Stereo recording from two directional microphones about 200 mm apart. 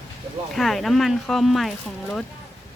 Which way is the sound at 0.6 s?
Centre (ahead or behind).